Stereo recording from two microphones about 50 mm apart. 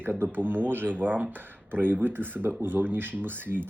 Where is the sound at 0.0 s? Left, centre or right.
Right.